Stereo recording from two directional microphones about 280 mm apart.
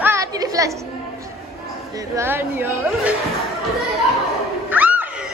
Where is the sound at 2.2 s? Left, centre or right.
Centre.